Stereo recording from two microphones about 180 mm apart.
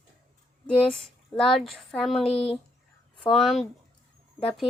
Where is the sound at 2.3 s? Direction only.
30° left (ahead or behind).